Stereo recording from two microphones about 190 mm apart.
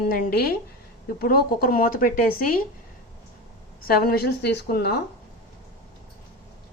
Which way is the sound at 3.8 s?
55° left (ahead or behind).